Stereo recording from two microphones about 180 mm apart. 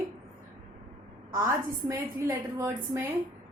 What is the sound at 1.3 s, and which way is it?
A woman's voice, 15° right (ahead or behind).